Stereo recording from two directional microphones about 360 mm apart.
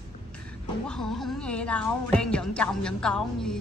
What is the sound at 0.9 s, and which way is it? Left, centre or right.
Speech, centre.